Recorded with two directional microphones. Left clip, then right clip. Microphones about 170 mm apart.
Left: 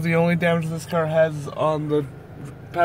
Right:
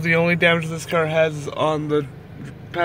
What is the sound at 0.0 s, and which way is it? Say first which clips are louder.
Speech: right 4 dB; 5° left (ahead or behind).